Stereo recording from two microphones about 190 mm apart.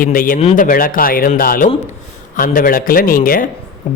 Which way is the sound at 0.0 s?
45° left (ahead or behind).